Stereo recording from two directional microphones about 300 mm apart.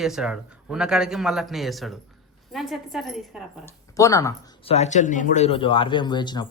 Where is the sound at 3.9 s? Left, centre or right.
Centre.